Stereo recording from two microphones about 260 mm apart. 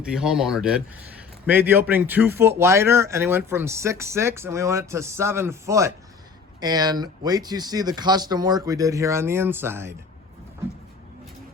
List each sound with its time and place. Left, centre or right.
0.0 s a man's voice: centre